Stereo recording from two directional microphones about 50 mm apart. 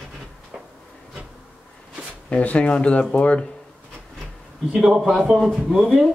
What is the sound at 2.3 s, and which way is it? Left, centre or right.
Speech, left.